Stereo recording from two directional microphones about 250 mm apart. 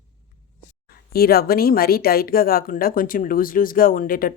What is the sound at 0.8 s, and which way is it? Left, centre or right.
Speech, left.